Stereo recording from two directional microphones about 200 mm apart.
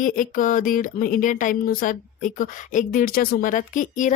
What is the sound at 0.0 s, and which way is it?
A woman's voice, 40° left (ahead or behind).